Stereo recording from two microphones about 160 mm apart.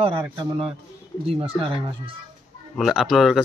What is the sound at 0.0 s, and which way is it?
Speech, 35° right (ahead or behind).